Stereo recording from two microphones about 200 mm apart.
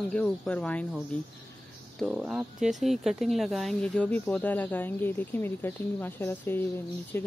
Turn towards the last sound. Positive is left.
turn(degrees=10)  # may be behind; listen again after turning